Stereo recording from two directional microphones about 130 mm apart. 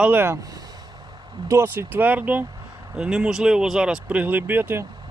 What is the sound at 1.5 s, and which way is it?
Speech, 20° right (ahead or behind).